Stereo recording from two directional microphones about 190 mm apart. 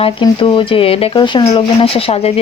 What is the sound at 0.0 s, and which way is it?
Speech, 25° left (ahead or behind).